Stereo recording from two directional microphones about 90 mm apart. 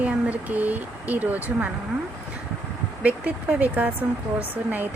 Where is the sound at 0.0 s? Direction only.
15° right (ahead or behind).